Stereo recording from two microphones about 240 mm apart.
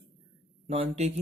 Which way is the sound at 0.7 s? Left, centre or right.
Right.